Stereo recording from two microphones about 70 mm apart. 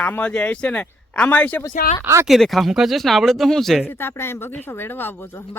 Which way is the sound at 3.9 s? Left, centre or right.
Left.